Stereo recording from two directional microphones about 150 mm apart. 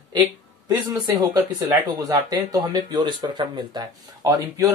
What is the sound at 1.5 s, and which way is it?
Speech, 25° right (ahead or behind).